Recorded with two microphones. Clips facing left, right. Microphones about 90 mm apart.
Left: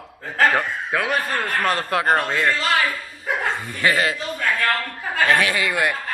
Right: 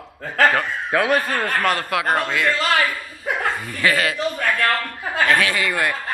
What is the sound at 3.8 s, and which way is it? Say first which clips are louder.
Speech: even; 25° left (ahead or behind).